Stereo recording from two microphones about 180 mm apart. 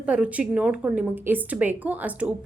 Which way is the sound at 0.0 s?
5° right (ahead or behind).